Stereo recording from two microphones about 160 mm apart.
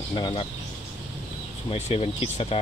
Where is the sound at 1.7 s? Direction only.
40° left (ahead or behind).